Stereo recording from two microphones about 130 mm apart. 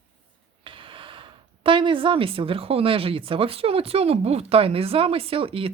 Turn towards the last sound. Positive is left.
turn(degrees=-45)  # may be behind; listen again after turning